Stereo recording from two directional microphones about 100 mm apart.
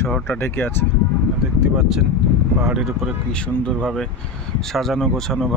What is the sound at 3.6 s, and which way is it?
Speech, 5° left (ahead or behind).